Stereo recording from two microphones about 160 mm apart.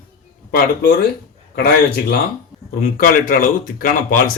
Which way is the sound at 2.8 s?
60° left (ahead or behind).